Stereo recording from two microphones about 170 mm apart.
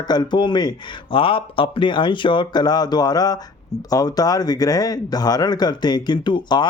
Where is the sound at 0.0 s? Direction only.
25° left (ahead or behind).